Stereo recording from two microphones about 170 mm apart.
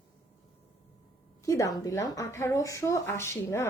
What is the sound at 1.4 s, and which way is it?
Speech, 20° left (ahead or behind).